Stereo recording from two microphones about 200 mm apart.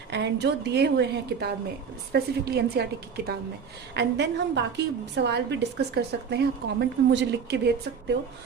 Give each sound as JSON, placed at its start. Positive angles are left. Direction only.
{"t": 0.1, "sound": "a woman's voice", "side_deg": -60}
{"t": 3.9, "sound": "a woman's voice", "side_deg": -60}